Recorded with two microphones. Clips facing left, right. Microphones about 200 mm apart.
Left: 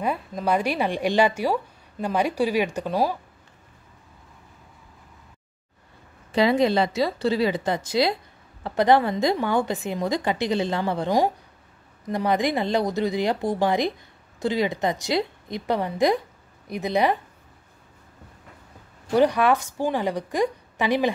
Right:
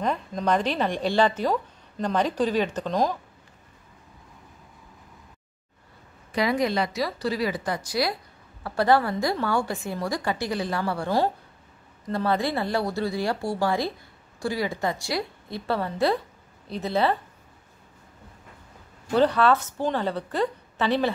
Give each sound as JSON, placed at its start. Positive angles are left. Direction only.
{"t": 0.0, "sound": "a woman's voice", "side_deg": 5}
{"t": 6.3, "sound": "a woman's voice", "side_deg": 25}
{"t": 19.1, "sound": "a woman's voice", "side_deg": 15}